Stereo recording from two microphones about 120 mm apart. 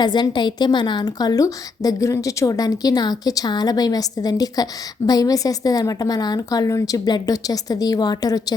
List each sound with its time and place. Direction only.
0.0 s a woman's voice: 35° left (ahead or behind)